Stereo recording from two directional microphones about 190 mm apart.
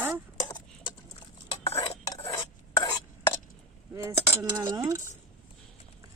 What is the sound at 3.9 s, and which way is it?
Speech, 15° right (ahead or behind).